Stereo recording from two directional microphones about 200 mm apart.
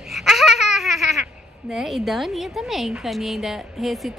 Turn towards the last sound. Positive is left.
turn(degrees=0)  # may be behind; listen again after turning